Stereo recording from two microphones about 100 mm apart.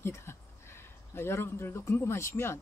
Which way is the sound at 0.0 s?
25° left (ahead or behind).